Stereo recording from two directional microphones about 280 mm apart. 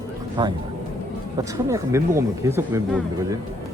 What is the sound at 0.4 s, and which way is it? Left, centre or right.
Speech, centre.